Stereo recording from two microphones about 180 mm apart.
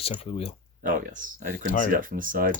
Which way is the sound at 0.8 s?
50° right (ahead or behind).